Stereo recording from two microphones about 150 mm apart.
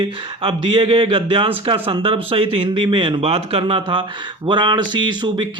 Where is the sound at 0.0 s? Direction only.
35° right (ahead or behind).